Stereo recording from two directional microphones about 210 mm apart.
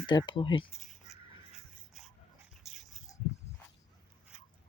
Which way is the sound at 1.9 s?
Centre (ahead or behind).